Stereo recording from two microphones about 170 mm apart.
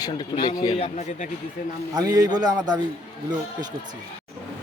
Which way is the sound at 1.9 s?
20° right (ahead or behind).